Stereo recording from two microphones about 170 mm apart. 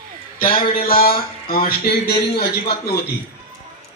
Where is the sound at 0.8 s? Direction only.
60° left (ahead or behind).